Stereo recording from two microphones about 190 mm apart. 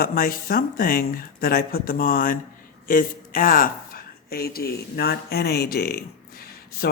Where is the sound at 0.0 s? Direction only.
50° left (ahead or behind).